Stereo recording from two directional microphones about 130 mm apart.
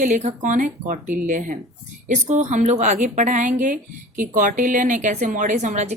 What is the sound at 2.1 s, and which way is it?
A woman's voice, 65° right (ahead or behind).